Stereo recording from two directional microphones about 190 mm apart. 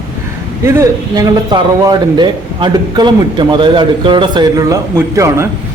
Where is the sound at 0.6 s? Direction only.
15° right (ahead or behind).